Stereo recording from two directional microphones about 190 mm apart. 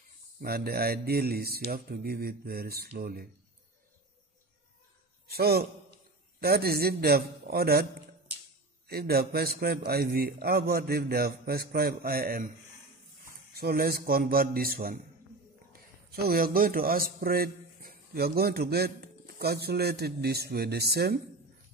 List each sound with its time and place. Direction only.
0.4 s speech: 55° right (ahead or behind)
5.3 s a man's voice: 55° right (ahead or behind)
8.8 s a man's voice: 55° right (ahead or behind)
13.6 s a man's voice: 55° right (ahead or behind)